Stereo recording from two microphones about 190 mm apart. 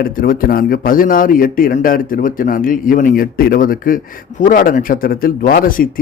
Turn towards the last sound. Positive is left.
turn(degrees=50)  # may be behind; listen again after turning